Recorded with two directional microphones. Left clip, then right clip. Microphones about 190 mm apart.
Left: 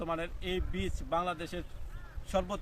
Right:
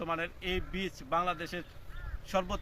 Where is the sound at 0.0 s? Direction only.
10° left (ahead or behind).